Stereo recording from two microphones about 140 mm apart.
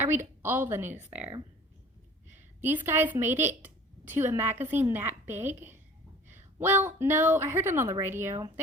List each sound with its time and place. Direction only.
0.0 s a woman's voice: 15° right (ahead or behind)
2.3 s a woman's voice: 15° right (ahead or behind)